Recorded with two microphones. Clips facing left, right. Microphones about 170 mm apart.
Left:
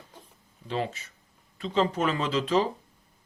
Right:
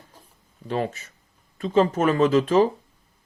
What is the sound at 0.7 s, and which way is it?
Speech, 50° right (ahead or behind).